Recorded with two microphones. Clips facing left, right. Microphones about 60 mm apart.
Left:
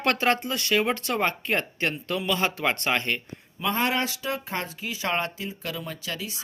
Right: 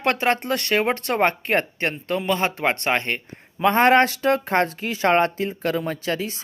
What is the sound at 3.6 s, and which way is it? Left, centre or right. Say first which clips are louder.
Speech: right 10 dB; right.